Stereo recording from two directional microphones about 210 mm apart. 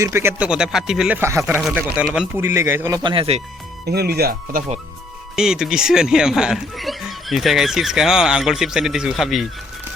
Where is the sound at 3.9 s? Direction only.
50° right (ahead or behind).